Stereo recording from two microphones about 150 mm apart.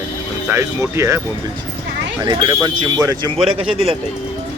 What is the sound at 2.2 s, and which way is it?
Speech, 25° right (ahead or behind).